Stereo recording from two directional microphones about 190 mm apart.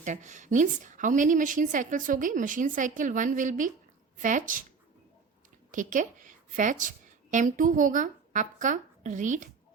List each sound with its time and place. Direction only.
0.0 s a woman's voice: 40° right (ahead or behind)
5.7 s a woman's voice: 40° right (ahead or behind)